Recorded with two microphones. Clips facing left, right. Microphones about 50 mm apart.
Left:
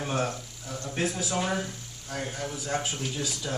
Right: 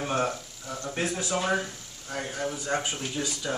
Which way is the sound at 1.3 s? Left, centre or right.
Centre.